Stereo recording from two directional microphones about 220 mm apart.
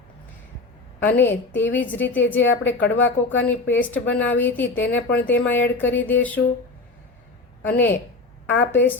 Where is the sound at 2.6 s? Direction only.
55° left (ahead or behind).